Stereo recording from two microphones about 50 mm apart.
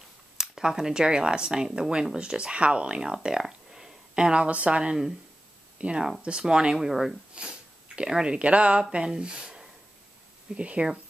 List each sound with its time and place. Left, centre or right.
0.4 s speech: centre
7.3 s speech: centre